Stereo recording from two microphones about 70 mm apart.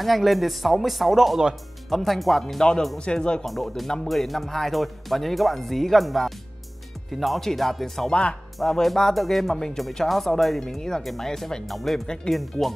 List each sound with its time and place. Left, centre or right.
0.0 s speech: centre
8.1 s speech: centre
8.5 s speech: centre